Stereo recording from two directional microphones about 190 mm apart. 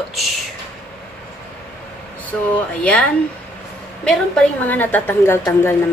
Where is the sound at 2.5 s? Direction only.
5° left (ahead or behind).